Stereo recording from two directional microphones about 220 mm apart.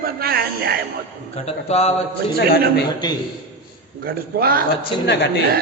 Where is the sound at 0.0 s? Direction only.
45° right (ahead or behind).